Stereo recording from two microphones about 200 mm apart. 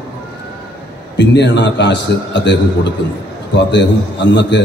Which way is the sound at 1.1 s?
60° left (ahead or behind).